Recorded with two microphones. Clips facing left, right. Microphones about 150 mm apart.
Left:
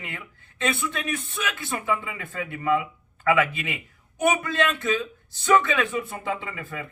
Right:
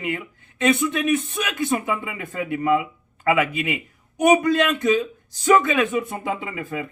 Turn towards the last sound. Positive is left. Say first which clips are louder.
# right 6 dB
turn(degrees=-15)  # may be behind; listen again after turning